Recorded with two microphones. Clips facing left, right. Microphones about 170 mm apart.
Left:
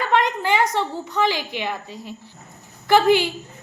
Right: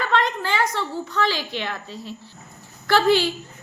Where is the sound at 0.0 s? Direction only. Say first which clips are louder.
Left 2 dB; 15° left (ahead or behind).